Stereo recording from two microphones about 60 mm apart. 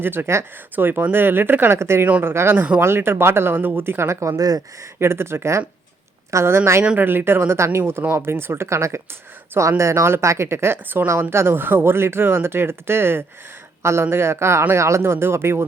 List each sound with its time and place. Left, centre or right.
0.0 s speech: right
4.9 s speech: right
7.0 s speech: right